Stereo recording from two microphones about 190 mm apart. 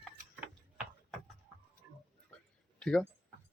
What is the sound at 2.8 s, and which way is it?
Speech, 5° left (ahead or behind).